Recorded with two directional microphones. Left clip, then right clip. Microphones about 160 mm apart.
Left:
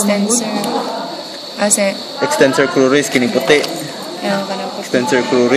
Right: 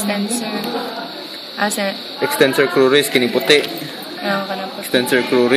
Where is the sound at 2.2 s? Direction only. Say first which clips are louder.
Left 2 dB; 25° right (ahead or behind).